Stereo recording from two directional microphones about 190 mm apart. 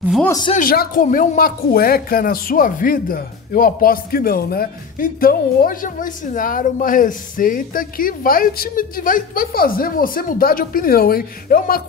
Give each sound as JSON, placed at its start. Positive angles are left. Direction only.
{"t": 0.2, "sound": "speech", "side_deg": 20}
{"t": 0.6, "sound": "speech", "side_deg": 50}